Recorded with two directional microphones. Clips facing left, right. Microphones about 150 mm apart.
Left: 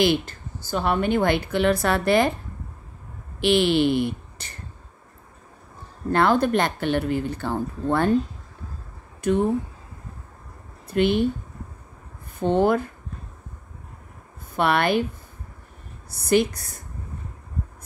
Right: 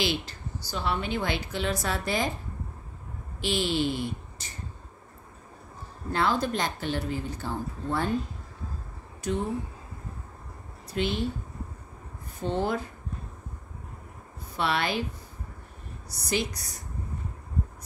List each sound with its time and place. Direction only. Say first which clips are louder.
0.0 s speech: left 9 dB; 55° left (ahead or behind)
3.3 s speech: left 8 dB; 65° left (ahead or behind)
6.1 s speech: left 7 dB; 55° left (ahead or behind)
9.2 s speech: left 8 dB; 55° left (ahead or behind)
10.9 s speech: left 8 dB; 55° left (ahead or behind)
12.4 s speech: left 8 dB; 55° left (ahead or behind)
14.5 s speech: left 7 dB; 55° left (ahead or behind)
16.1 s a woman's voice: left 10 dB; 55° left (ahead or behind)